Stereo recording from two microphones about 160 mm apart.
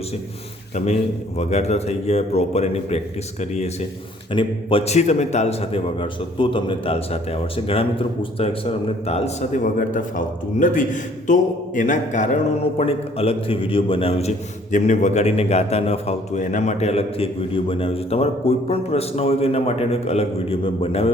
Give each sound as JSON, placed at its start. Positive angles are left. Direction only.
{"t": 1.4, "sound": "a man's voice", "side_deg": 45}
{"t": 4.3, "sound": "a man's voice", "side_deg": 30}
{"t": 9.7, "sound": "a man's voice", "side_deg": 55}